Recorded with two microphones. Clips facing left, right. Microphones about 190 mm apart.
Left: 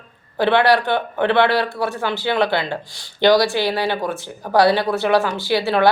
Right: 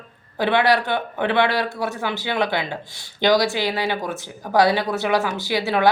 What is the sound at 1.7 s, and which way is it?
Speech, 20° right (ahead or behind).